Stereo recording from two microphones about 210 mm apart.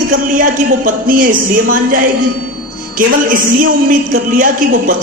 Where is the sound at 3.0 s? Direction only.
40° right (ahead or behind).